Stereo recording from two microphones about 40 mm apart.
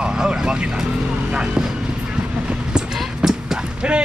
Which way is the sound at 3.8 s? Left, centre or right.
Right.